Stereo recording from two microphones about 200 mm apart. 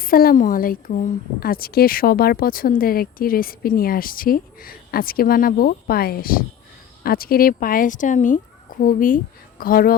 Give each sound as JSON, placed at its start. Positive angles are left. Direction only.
{"t": 0.0, "sound": "a woman's voice", "side_deg": 45}